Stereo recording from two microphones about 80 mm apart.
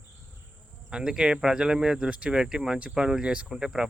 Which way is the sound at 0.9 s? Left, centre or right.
Centre.